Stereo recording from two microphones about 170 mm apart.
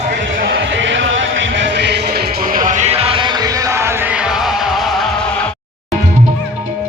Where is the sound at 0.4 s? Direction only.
90° right; by 5.1 s centre (ahead or behind).